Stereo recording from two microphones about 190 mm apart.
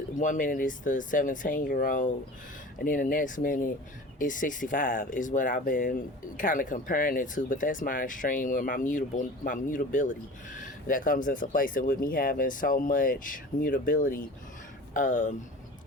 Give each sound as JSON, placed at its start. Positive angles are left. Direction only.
{"t": 0.2, "sound": "speech", "side_deg": 45}